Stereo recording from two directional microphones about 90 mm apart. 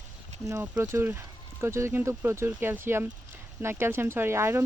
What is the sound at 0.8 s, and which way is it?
Speech, 30° right (ahead or behind).